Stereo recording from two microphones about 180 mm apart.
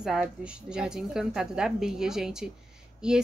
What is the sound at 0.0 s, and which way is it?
A woman's voice, centre (ahead or behind).